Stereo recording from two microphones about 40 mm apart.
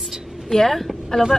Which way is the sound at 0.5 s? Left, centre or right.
Centre.